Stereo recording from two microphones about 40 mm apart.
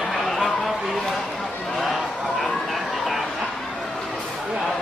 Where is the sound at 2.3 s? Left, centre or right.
Centre.